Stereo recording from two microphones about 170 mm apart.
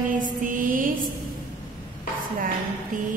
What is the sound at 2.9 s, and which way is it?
Speech, 55° right (ahead or behind).